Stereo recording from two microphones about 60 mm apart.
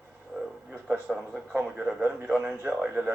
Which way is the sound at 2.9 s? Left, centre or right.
Right.